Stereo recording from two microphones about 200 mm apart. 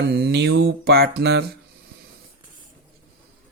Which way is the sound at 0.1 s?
55° right (ahead or behind).